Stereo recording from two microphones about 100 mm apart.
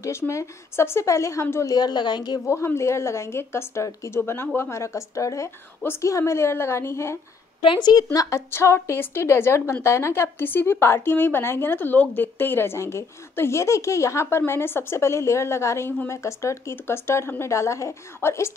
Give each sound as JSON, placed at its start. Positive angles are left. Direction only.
{"t": 0.0, "sound": "a woman's voice", "side_deg": 30}
{"t": 2.4, "sound": "a woman's voice", "side_deg": 25}
{"t": 7.6, "sound": "a woman's voice", "side_deg": 50}